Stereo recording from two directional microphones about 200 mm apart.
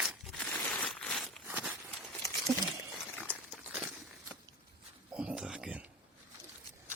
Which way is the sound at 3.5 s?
Centre (ahead or behind).